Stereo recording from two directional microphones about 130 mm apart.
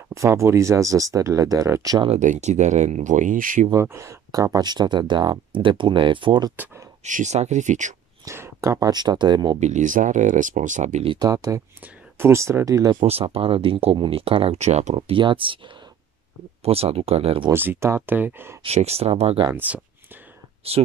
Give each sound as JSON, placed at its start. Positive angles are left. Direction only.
{"t": 0.1, "sound": "speech", "side_deg": -25}
{"t": 2.1, "sound": "speech", "side_deg": -65}
{"t": 3.7, "sound": "speech", "side_deg": -20}
{"t": 7.1, "sound": "speech", "side_deg": -70}
{"t": 8.3, "sound": "speech", "side_deg": -25}
{"t": 9.6, "sound": "speech", "side_deg": -70}
{"t": 11.1, "sound": "speech", "side_deg": -30}
{"t": 12.9, "sound": "speech", "side_deg": -50}
{"t": 15.0, "sound": "speech", "side_deg": -40}
{"t": 16.6, "sound": "speech", "side_deg": -50}
{"t": 17.5, "sound": "speech", "side_deg": -20}
{"t": 18.6, "sound": "speech", "side_deg": -55}
{"t": 19.5, "sound": "speech", "side_deg": -10}
{"t": 20.6, "sound": "speech", "side_deg": -50}